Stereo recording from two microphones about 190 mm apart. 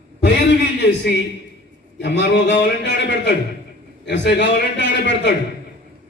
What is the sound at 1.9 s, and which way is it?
A man's voice, 70° left (ahead or behind).